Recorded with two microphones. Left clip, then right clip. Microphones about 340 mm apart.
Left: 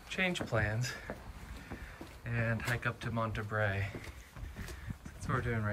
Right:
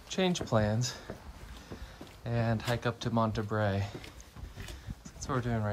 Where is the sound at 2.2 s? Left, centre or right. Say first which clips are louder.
Right 3 dB; centre.